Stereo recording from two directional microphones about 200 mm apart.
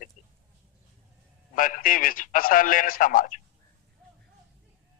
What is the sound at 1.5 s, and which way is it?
A man's voice, 45° left (ahead or behind).